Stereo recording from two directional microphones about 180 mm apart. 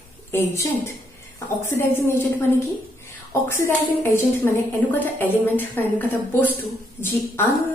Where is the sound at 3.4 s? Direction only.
10° left (ahead or behind).